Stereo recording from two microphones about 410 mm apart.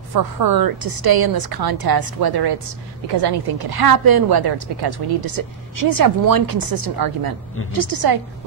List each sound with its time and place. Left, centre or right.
0.1 s a woman's voice: right
3.1 s a woman's voice: right